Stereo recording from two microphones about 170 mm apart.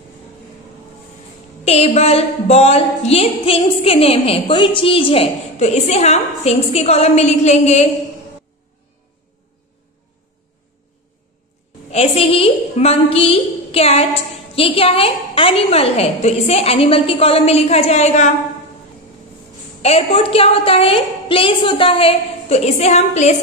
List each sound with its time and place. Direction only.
1.6 s a woman's voice: 40° left (ahead or behind)
11.9 s a woman's voice: 35° left (ahead or behind)
19.8 s a woman's voice: 35° left (ahead or behind)